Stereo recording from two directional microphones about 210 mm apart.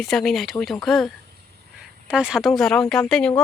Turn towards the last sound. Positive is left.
turn(degrees=5)  # may be behind; listen again after turning